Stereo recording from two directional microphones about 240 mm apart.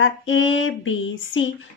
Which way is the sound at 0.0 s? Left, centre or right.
Left.